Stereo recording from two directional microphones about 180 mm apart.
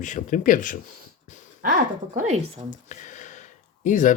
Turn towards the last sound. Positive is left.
turn(degrees=45)  # may be behind; listen again after turning